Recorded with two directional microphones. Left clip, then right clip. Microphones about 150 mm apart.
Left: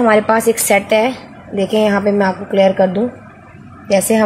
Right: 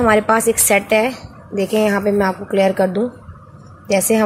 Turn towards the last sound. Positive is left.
turn(degrees=-15)  # may be behind; listen again after turning